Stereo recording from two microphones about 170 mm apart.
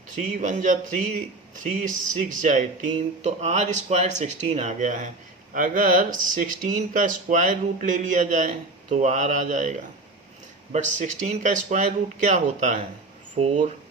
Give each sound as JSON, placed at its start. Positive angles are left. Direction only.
{"t": 0.2, "sound": "speech", "side_deg": -50}
{"t": 13.4, "sound": "speech", "side_deg": -35}